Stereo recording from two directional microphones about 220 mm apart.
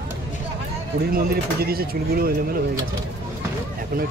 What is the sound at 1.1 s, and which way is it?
Speech, 45° right (ahead or behind).